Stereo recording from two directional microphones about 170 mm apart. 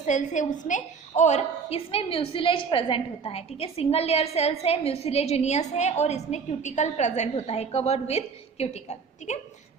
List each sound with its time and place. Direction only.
0.0 s a woman's voice: 45° left (ahead or behind)